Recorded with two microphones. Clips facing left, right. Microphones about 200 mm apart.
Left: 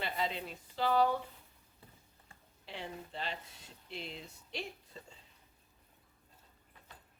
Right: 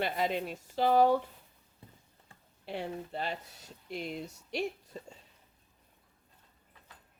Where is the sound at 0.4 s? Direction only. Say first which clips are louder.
Right 6 dB; 45° right (ahead or behind).